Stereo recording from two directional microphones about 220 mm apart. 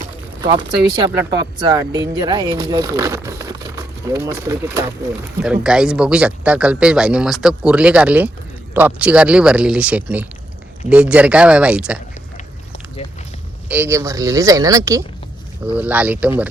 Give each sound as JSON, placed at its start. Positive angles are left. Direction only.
{"t": 0.4, "sound": "speech", "side_deg": -20}
{"t": 13.7, "sound": "speech", "side_deg": -10}